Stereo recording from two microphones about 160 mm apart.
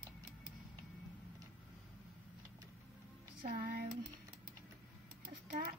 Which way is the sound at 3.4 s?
65° right (ahead or behind).